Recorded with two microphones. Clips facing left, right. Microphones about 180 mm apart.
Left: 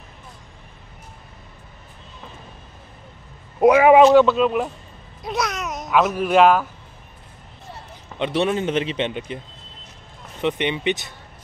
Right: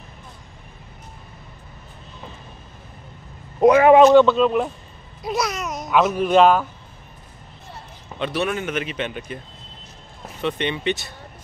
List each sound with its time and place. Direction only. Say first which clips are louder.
3.5 s speech: even; 5° left (ahead or behind)
8.2 s a man's voice: left 3 dB; 25° left (ahead or behind)
10.4 s speech: left 2 dB; 15° left (ahead or behind)